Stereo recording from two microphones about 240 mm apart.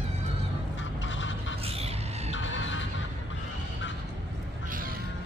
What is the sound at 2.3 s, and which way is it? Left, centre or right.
Goose, left.